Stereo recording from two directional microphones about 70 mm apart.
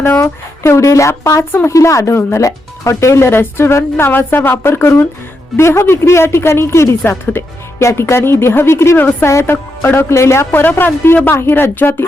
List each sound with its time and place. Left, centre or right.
0.2 s speech: left
10.5 s speech: left